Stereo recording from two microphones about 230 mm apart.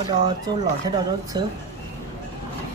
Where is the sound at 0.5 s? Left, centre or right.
Centre.